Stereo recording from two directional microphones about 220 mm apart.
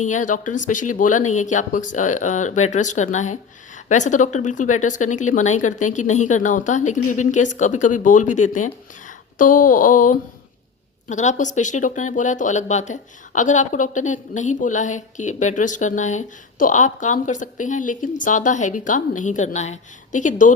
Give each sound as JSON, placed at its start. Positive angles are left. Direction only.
{"t": 0.0, "sound": "speech", "side_deg": 35}